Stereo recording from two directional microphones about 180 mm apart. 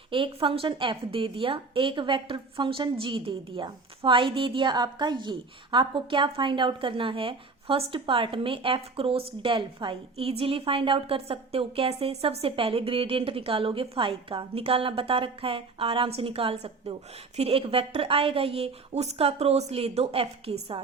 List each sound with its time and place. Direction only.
0.1 s a woman's voice: 30° right (ahead or behind)